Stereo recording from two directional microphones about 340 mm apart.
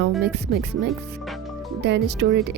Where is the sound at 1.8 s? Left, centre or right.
Right.